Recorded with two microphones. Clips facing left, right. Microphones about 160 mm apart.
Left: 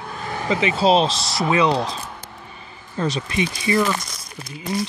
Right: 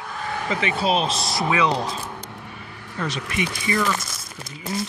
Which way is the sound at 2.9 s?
30° left (ahead or behind).